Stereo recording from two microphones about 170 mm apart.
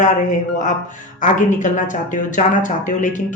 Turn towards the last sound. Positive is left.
turn(degrees=50)  # may be behind; listen again after turning